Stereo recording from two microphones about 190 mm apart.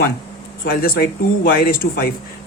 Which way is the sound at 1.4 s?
50° left (ahead or behind).